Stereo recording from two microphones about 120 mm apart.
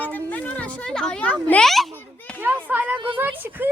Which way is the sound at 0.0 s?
15° left (ahead or behind).